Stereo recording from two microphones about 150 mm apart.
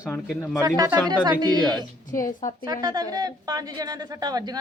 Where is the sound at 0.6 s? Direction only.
25° right (ahead or behind).